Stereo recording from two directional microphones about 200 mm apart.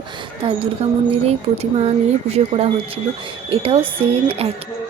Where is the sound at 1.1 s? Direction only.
30° right (ahead or behind).